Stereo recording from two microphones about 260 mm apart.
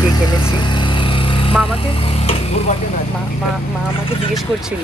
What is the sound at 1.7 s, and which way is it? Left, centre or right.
Speech, left.